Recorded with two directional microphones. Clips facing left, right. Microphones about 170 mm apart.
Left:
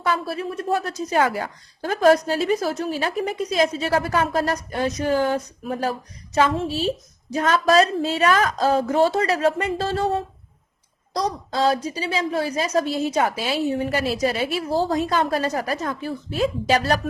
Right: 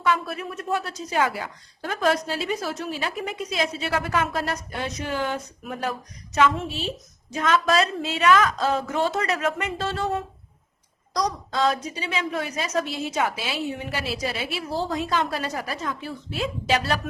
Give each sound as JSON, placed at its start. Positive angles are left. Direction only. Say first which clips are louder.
{"t": 0.0, "sound": "a woman's voice", "louder": "left 1 dB", "side_deg": 30}